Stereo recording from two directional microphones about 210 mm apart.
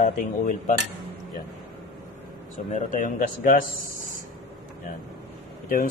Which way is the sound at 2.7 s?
40° left (ahead or behind).